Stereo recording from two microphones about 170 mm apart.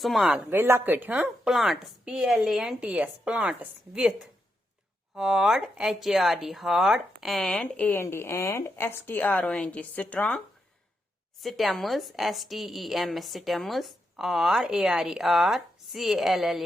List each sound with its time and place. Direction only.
0.0 s a woman's voice: centre (ahead or behind)
0.5 s a woman's voice: 15° right (ahead or behind)